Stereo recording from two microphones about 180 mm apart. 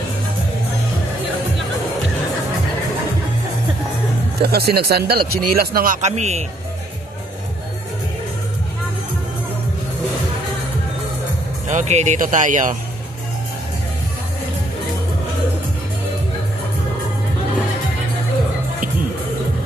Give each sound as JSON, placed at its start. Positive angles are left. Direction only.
{"t": 4.4, "sound": "speech", "side_deg": -60}
{"t": 11.6, "sound": "speech", "side_deg": -40}